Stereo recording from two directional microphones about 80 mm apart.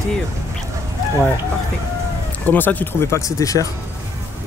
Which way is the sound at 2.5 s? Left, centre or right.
Left.